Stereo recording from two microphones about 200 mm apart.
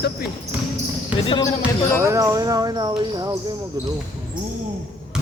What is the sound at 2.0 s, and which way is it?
Speech, 15° right (ahead or behind).